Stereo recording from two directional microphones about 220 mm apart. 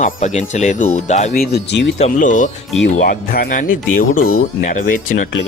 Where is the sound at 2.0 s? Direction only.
35° left (ahead or behind).